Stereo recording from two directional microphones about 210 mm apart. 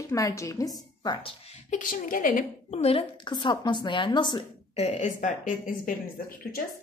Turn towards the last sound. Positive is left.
turn(degrees=40)  # may be behind; listen again after turning